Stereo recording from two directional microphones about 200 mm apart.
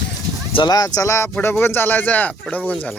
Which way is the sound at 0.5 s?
20° left (ahead or behind).